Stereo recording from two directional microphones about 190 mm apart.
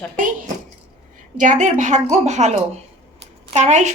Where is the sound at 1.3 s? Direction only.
40° right (ahead or behind).